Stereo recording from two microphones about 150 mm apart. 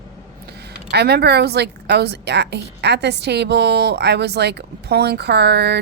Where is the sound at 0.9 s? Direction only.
90° right.